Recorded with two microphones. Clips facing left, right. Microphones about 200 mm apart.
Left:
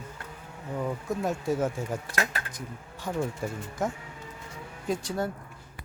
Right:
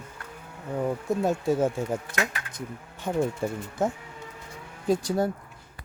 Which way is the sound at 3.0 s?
25° right (ahead or behind).